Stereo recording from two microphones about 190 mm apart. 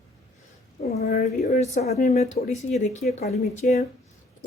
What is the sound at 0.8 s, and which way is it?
Speech, 35° left (ahead or behind).